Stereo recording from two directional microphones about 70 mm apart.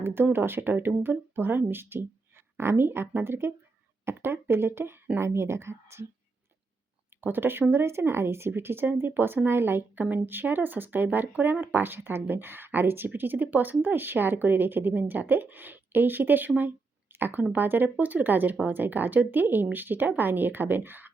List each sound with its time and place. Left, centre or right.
0.0 s speech: right
7.2 s speech: right